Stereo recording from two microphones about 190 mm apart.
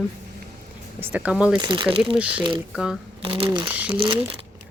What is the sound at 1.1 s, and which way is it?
Speech, 5° right (ahead or behind).